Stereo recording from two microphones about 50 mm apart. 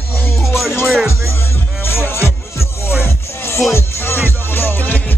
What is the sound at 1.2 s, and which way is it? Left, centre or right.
Music, left.